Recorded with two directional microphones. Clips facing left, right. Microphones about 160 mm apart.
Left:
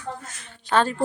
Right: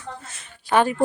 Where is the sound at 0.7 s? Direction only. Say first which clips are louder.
Right 2 dB; 15° right (ahead or behind).